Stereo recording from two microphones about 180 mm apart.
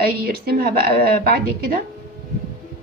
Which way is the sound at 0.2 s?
55° right (ahead or behind).